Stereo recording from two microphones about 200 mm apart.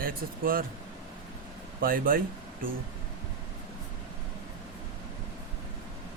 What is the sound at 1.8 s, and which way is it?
Speech, 45° right (ahead or behind).